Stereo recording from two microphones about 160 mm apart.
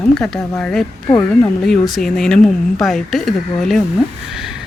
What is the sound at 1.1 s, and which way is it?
Speech, 20° left (ahead or behind).